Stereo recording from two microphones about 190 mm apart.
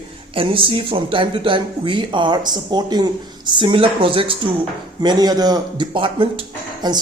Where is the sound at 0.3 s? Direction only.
30° right (ahead or behind).